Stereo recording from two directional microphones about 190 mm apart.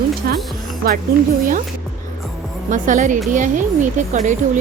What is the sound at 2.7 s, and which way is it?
A woman's voice, 40° right (ahead or behind).